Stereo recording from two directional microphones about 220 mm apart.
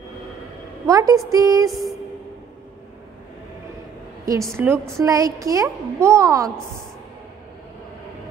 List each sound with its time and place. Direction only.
0.8 s a woman's voice: 15° right (ahead or behind)
1.7 s music: centre (ahead or behind)
4.6 s a woman's voice: 10° right (ahead or behind)